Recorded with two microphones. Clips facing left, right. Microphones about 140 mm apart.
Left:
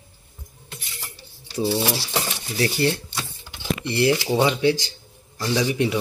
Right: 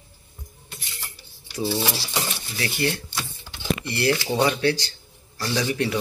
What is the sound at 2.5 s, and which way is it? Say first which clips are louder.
Speech: left 5 dB; 35° left (ahead or behind).